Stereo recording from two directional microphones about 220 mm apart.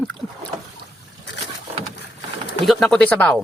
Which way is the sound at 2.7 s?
Centre (ahead or behind).